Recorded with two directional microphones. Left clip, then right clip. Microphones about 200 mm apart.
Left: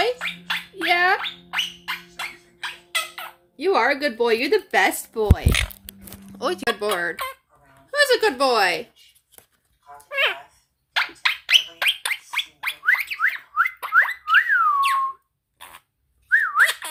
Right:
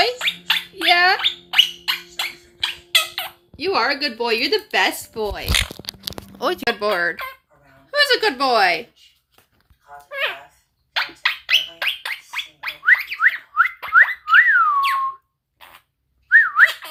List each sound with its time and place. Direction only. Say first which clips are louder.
0.0 s gargling: right 4 dB; centre (ahead or behind)
3.6 s speech: even; 20° left (ahead or behind)
5.1 s speech: left 1 dB; 10° left (ahead or behind)
5.5 s speech: right 3 dB; centre (ahead or behind)
10.1 s a sound: left 3 dB; 20° left (ahead or behind)
10.9 s gargling: even; 10° left (ahead or behind)
13.1 s a sound: right 4 dB; centre (ahead or behind)
15.5 s a sound: left 1 dB; 15° left (ahead or behind)
16.3 s whistling: right 5 dB; centre (ahead or behind)